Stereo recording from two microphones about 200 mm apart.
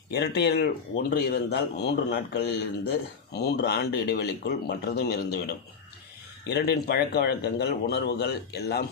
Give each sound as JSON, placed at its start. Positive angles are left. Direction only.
{"t": 0.1, "sound": "speech", "side_deg": 55}